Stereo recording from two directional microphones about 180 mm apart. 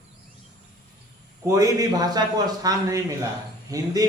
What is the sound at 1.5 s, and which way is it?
A man's voice, 20° right (ahead or behind).